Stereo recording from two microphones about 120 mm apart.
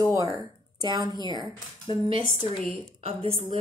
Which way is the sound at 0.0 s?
30° right (ahead or behind).